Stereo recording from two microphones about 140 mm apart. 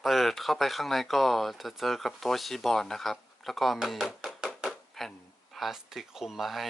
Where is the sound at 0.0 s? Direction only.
Centre (ahead or behind).